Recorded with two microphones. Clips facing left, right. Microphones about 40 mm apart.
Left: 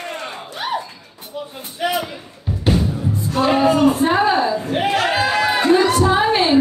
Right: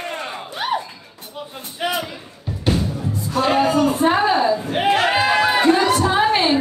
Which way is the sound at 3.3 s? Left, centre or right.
Centre.